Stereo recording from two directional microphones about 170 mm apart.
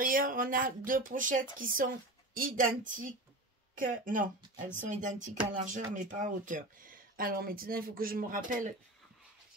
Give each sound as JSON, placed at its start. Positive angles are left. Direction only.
{"t": 0.0, "sound": "speech", "side_deg": -55}